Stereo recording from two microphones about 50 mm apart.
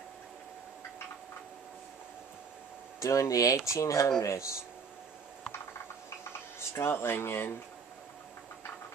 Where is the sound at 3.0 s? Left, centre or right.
Left.